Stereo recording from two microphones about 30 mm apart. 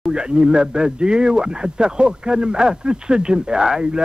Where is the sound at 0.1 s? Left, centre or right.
Right.